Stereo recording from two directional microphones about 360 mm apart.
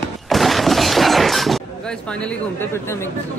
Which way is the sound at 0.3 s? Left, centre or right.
Centre.